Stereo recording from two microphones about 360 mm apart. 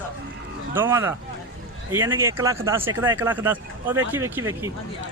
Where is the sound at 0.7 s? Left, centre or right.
Centre.